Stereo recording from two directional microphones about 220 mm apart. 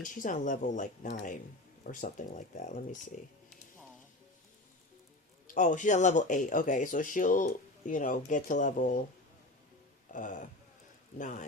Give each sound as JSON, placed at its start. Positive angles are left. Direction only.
{"t": 0.1, "sound": "speech", "side_deg": 35}
{"t": 5.5, "sound": "speech", "side_deg": 35}
{"t": 10.1, "sound": "speech", "side_deg": 35}